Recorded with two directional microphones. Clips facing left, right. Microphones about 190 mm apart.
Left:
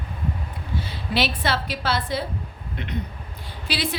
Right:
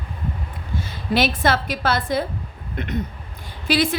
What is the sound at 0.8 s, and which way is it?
A woman's voice, 45° right (ahead or behind).